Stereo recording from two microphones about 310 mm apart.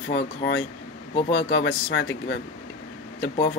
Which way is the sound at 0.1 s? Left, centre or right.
Left.